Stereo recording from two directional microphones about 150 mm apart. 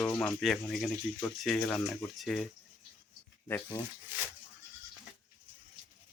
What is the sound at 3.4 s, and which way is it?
Stir, 20° left (ahead or behind).